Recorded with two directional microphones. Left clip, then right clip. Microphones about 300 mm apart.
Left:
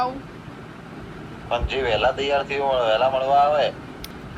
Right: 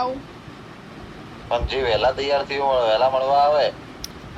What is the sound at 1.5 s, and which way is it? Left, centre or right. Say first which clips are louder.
Speech: right 1 dB; centre.